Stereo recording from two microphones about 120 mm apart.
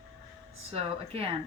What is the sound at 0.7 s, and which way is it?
Speech, 55° right (ahead or behind).